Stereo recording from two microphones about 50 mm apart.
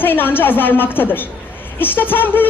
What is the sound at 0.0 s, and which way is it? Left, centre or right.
A woman's voice, left.